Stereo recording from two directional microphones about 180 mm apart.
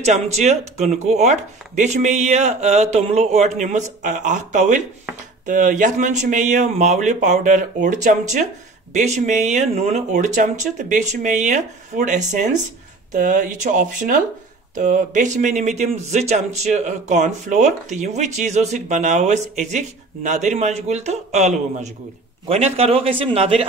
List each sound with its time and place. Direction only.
0.0 s speech: 40° right (ahead or behind)